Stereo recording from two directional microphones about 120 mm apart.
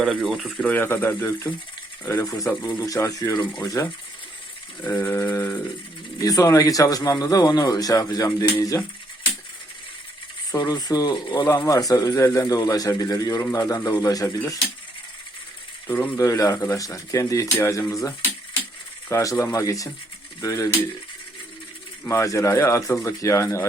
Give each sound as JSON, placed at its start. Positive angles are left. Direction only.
{"t": 0.2, "sound": "speech", "side_deg": -5}
{"t": 0.5, "sound": "speech", "side_deg": 10}
{"t": 2.6, "sound": "speech", "side_deg": 30}
{"t": 4.8, "sound": "speech", "side_deg": 15}
{"t": 10.5, "sound": "speech", "side_deg": 35}
{"t": 15.9, "sound": "speech", "side_deg": 15}
{"t": 16.1, "sound": "speech", "side_deg": 25}
{"t": 22.0, "sound": "speech", "side_deg": 25}